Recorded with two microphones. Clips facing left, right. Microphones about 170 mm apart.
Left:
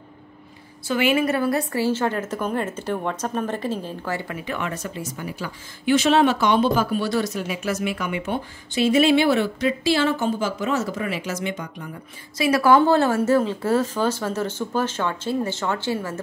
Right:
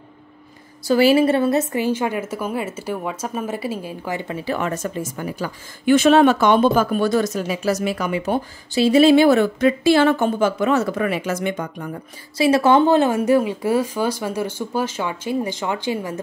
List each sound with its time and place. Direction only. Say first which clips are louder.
0.8 s a woman's voice: right 6 dB; 35° right (ahead or behind); by 12.0 s 50° right (ahead or behind)
12.4 s speech: right 2 dB; 25° right (ahead or behind)